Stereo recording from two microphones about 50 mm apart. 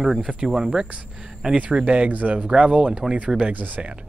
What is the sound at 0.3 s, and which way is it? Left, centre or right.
Speech, centre.